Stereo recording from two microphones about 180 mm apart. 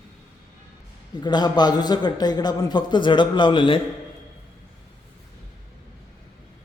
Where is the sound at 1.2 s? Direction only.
25° left (ahead or behind).